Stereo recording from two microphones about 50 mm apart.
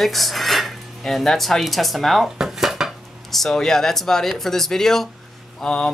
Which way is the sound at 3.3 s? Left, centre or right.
Centre.